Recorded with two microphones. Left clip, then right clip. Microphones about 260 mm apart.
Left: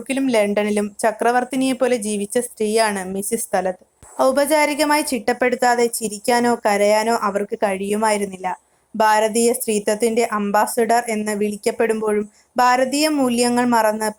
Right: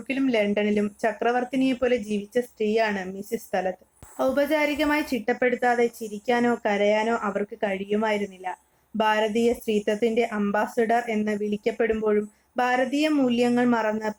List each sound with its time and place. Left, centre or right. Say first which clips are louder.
0.1 s a woman's voice: left 6 dB; centre